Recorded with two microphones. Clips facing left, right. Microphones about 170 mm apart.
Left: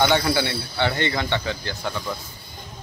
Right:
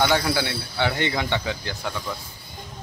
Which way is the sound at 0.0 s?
5° right (ahead or behind).